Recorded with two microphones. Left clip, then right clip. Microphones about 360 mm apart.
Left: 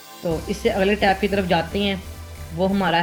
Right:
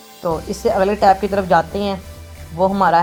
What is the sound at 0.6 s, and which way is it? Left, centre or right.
Speech, right.